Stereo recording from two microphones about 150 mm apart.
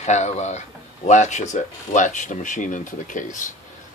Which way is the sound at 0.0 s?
50° left (ahead or behind).